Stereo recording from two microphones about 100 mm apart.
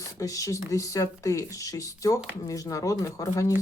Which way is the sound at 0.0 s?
35° left (ahead or behind).